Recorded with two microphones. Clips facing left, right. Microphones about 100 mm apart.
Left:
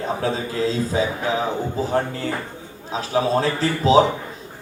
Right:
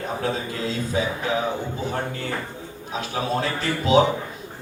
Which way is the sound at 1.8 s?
30° left (ahead or behind).